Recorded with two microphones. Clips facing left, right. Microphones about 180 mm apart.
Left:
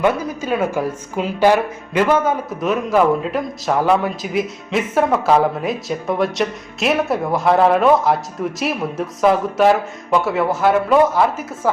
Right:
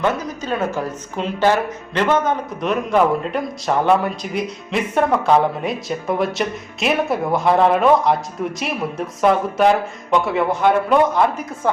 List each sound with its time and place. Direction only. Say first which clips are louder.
0.0 s speech: left 3 dB; 10° left (ahead or behind)